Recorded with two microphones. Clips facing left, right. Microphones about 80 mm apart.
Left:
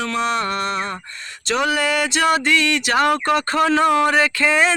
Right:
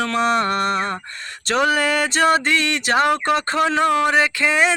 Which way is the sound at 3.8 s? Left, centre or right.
Centre.